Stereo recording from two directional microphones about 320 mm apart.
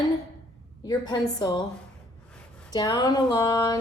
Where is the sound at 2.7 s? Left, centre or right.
Centre.